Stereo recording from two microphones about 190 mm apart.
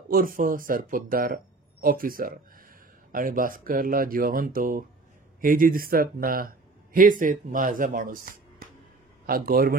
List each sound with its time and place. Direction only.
0.1 s speech: 50° right (ahead or behind)